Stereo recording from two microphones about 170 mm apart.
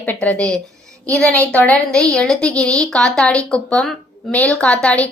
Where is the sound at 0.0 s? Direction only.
10° left (ahead or behind).